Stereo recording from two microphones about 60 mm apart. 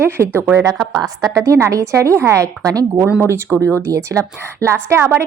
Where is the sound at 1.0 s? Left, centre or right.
Right.